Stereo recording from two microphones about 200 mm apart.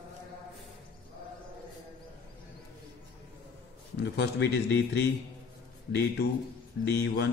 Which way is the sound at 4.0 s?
60° left (ahead or behind).